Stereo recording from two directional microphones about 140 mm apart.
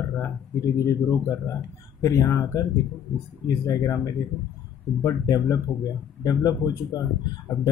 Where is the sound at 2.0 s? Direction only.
20° left (ahead or behind).